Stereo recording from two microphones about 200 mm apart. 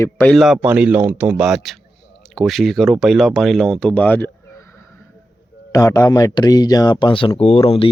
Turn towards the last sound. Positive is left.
turn(degrees=30)  # may be behind; listen again after turning